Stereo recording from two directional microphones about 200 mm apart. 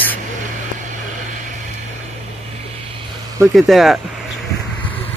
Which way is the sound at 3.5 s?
Centre (ahead or behind).